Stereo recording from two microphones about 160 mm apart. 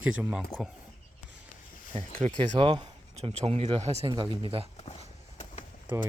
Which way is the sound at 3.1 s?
45° right (ahead or behind).